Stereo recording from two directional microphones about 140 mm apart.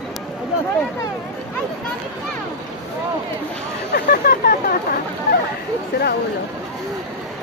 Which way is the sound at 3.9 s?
90° left.